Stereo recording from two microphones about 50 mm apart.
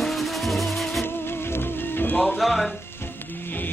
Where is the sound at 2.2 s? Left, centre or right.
Centre.